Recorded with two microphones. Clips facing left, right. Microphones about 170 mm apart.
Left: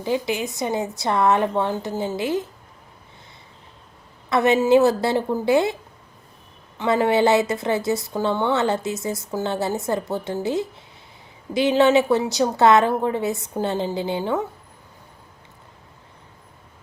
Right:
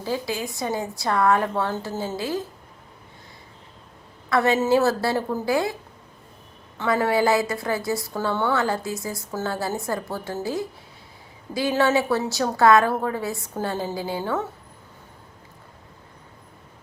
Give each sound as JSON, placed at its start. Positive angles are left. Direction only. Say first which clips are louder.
{"t": 0.0, "sound": "a woman's voice", "louder": "left 4 dB", "side_deg": 20}
{"t": 4.3, "sound": "a woman's voice", "louder": "left 3 dB", "side_deg": 20}
{"t": 6.7, "sound": "a woman's voice", "louder": "left 3 dB", "side_deg": 20}